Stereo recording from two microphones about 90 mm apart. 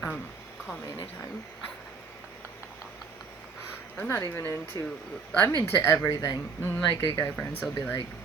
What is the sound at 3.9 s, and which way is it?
Speech, 20° left (ahead or behind).